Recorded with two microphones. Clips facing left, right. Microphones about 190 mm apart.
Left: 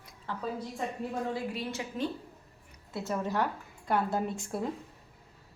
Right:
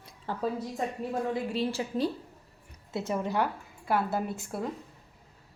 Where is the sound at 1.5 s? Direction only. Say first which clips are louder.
Right 6 dB; 30° right (ahead or behind).